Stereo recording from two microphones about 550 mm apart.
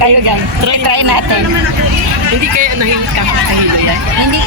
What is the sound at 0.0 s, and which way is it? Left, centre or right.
Speech, right.